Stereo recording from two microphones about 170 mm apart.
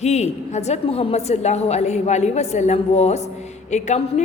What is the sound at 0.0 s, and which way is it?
A woman's voice, 40° left (ahead or behind).